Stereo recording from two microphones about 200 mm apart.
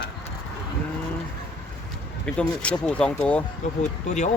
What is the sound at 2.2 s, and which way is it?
Speech, 5° left (ahead or behind).